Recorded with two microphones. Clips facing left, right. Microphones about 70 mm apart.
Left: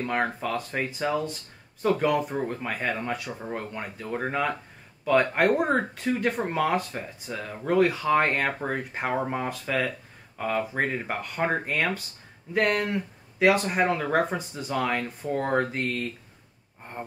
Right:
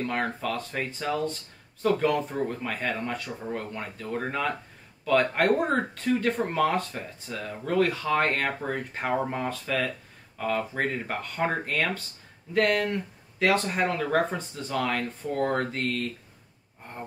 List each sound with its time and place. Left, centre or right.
0.0 s speech: centre